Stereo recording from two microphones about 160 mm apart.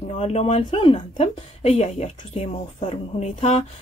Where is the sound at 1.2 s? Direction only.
45° left (ahead or behind).